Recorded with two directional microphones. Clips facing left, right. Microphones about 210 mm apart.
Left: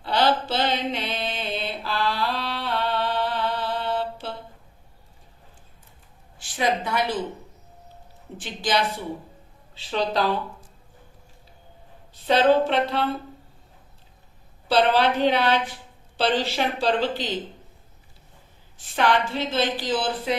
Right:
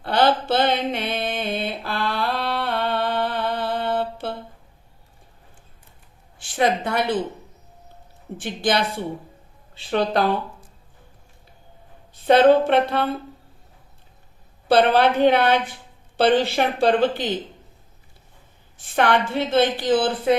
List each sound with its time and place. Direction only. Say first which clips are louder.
0.0 s mantra: right 3 dB; 55° right (ahead or behind)
6.6 s a woman's voice: right 3 dB; 60° right (ahead or behind)
8.4 s a woman's voice: right 3 dB; 55° right (ahead or behind)
12.3 s a woman's voice: right 4 dB; 55° right (ahead or behind)
14.7 s a woman's voice: right 3 dB; 55° right (ahead or behind)
18.9 s a woman's voice: right 3 dB; 60° right (ahead or behind)